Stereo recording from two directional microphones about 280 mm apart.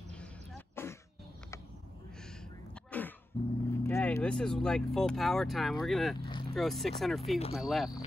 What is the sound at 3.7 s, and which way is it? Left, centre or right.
Speech, centre.